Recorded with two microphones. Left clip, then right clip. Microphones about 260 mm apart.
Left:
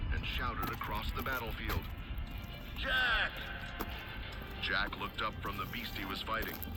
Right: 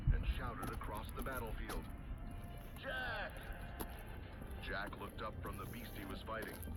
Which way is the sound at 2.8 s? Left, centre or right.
Left.